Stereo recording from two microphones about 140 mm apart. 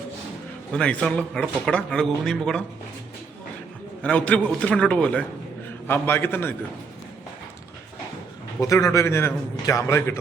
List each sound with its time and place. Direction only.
0.7 s a man's voice: 5° left (ahead or behind)
4.0 s a man's voice: 10° left (ahead or behind)
8.6 s a man's voice: 25° left (ahead or behind)